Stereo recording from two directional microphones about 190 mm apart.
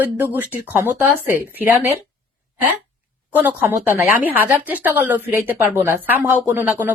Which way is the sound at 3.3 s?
10° right (ahead or behind).